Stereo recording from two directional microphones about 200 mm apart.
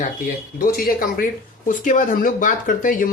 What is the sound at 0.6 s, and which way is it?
Speech, 50° left (ahead or behind).